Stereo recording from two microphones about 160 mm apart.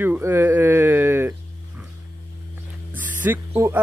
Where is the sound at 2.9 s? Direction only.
10° right (ahead or behind).